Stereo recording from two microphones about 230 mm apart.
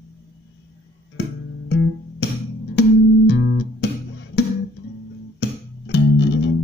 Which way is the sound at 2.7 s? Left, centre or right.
Left.